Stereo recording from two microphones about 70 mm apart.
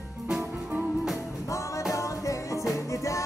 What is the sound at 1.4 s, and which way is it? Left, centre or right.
Music, left.